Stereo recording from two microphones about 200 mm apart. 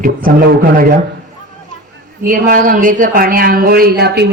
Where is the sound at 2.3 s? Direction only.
45° right (ahead or behind).